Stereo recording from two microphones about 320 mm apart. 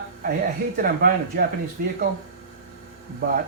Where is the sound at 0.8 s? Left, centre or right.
Right.